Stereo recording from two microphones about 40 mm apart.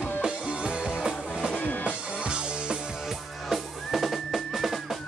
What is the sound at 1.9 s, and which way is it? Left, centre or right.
Music, right.